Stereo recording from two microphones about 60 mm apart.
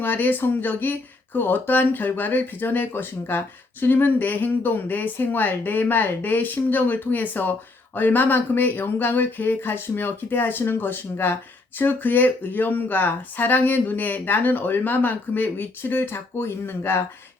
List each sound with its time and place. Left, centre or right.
0.0 s speech: left